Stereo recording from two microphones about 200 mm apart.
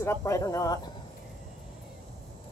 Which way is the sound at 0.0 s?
15° left (ahead or behind).